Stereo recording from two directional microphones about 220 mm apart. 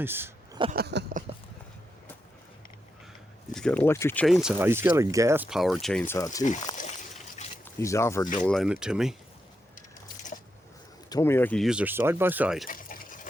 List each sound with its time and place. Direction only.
0.0 s speech: 10° right (ahead or behind)
0.7 s a sound: 45° right (ahead or behind)
3.5 s speech: 5° left (ahead or behind)
6.4 s speech: 35° left (ahead or behind)
6.7 s a sound: 35° left (ahead or behind)
7.6 s speech: 15° left (ahead or behind); by 9.1 s 5° right (ahead or behind)
11.1 s speech: 10° left (ahead or behind); by 12.6 s 5° right (ahead or behind)
12.6 s liquid: 40° left (ahead or behind)